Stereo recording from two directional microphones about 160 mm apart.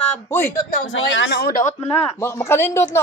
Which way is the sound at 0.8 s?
80° left.